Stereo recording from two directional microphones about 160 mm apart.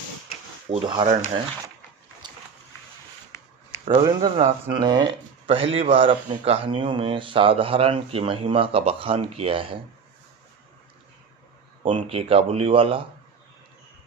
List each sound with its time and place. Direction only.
0.7 s speech: 35° right (ahead or behind)
2.2 s a sound: 30° right (ahead or behind)
3.8 s speech: 30° right (ahead or behind)
12.0 s speech: 35° right (ahead or behind)